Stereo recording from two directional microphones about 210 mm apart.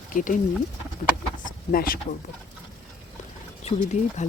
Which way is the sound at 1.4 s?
45° left (ahead or behind).